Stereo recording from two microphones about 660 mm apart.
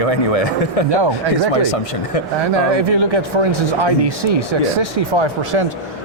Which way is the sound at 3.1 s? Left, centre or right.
Right.